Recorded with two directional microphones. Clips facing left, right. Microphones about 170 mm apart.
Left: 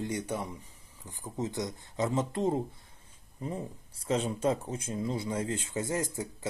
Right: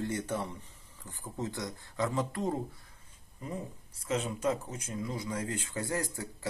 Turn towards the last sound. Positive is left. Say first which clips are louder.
# left 3 dB
turn(degrees=20)  # may be behind; listen again after turning